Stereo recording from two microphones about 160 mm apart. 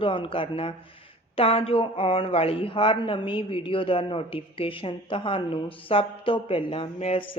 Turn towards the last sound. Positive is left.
turn(degrees=35)  # may be behind; listen again after turning